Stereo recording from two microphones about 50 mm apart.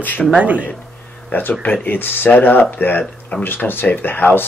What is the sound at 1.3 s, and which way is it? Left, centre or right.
Speech, left.